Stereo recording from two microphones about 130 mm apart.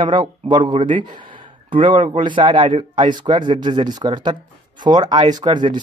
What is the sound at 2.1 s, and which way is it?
Speech, 40° right (ahead or behind).